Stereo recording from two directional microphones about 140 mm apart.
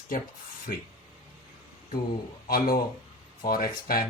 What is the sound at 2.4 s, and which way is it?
Speech, 90° left.